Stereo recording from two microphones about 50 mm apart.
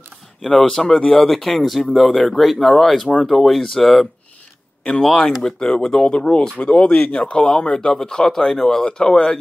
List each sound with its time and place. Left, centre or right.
0.4 s speech: centre
4.8 s speech: centre